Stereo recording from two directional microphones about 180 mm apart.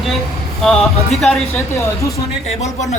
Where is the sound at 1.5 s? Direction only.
15° left (ahead or behind).